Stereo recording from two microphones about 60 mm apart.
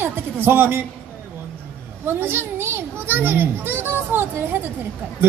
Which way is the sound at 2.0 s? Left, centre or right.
Right.